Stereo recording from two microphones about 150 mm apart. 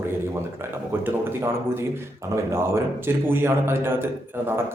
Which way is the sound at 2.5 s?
15° right (ahead or behind).